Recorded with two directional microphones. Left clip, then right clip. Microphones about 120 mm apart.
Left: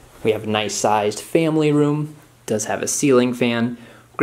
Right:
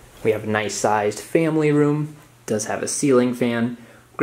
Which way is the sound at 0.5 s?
10° left (ahead or behind).